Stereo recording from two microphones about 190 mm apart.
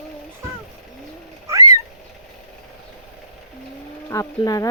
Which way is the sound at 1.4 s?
15° right (ahead or behind).